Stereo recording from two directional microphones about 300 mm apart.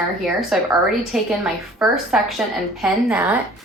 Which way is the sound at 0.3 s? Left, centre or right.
Centre.